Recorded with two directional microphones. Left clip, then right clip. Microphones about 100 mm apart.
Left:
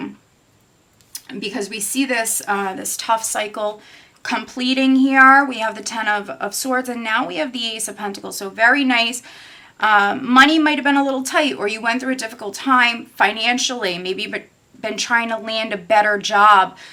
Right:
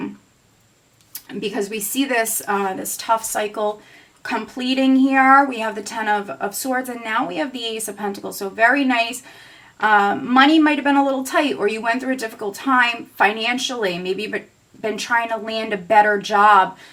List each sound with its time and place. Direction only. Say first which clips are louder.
1.1 s speech: right 1 dB; 15° left (ahead or behind)